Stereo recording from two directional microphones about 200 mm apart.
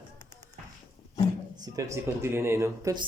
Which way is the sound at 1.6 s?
20° right (ahead or behind).